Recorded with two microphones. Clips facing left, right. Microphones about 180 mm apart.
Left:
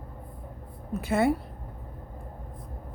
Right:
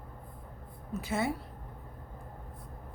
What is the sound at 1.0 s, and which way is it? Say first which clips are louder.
Speech: left 8 dB; 60° left (ahead or behind).